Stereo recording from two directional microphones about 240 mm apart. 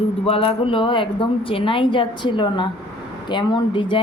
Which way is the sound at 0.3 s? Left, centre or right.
Left.